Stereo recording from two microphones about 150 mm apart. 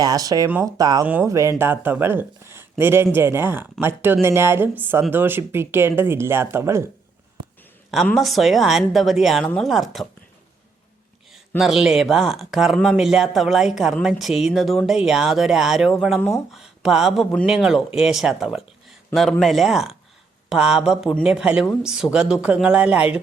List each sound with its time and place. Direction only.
0.0 s speech: 25° right (ahead or behind)
1.0 s speech: 10° right (ahead or behind)
8.0 s speech: centre (ahead or behind)
11.3 s speech: centre (ahead or behind)